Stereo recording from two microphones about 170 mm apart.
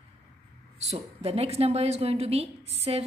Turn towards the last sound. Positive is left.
turn(degrees=-35)  # may be behind; listen again after turning